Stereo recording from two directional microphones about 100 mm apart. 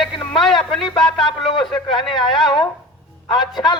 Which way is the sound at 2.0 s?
Centre (ahead or behind).